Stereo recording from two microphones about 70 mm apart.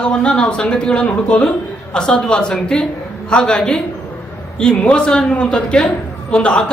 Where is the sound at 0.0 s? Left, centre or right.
Centre.